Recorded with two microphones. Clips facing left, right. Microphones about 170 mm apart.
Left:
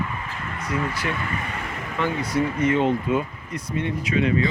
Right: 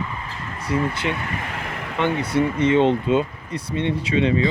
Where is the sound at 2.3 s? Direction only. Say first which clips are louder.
Right 3 dB; 25° right (ahead or behind).